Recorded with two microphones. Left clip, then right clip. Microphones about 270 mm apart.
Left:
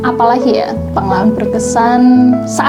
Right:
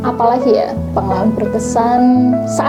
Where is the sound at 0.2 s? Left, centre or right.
Left.